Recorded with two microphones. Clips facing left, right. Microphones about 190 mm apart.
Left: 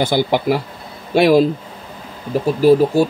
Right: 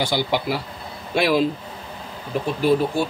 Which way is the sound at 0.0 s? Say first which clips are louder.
Left 6 dB; 50° left (ahead or behind).